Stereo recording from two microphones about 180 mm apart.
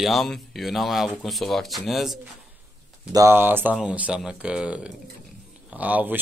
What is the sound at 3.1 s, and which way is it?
Speech, 15° right (ahead or behind).